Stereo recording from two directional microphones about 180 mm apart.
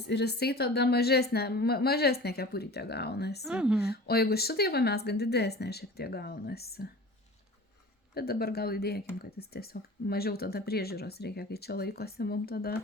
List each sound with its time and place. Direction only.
0.1 s speech: 65° left (ahead or behind)
3.4 s speech: 5° right (ahead or behind)
3.8 s speech: 60° left (ahead or behind)
8.1 s speech: 60° left (ahead or behind)